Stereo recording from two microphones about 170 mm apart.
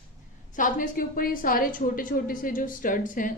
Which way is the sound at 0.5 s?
50° left (ahead or behind).